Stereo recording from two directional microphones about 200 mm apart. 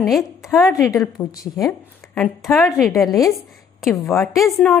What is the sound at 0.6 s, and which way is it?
A woman's voice, 15° left (ahead or behind).